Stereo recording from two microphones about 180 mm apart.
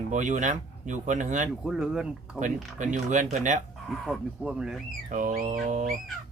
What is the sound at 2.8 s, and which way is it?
Speech, 45° right (ahead or behind).